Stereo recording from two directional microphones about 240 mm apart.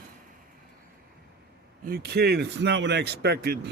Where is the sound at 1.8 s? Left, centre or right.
Right.